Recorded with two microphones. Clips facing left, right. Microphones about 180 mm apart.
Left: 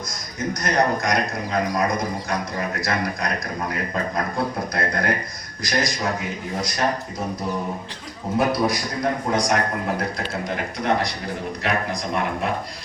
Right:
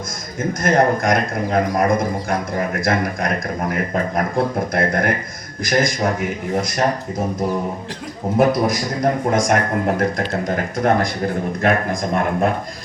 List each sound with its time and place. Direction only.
0.6 s a man's voice: 50° right (ahead or behind)
8.4 s a man's voice: 45° right (ahead or behind)